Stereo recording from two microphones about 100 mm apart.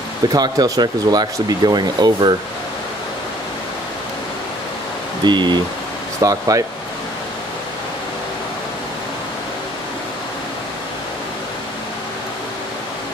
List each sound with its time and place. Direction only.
0.3 s speech: 40° right (ahead or behind)
5.2 s speech: 50° right (ahead or behind)
6.2 s speech: 35° right (ahead or behind)